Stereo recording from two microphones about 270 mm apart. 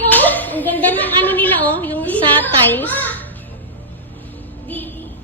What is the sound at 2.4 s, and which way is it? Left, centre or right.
Speech, centre.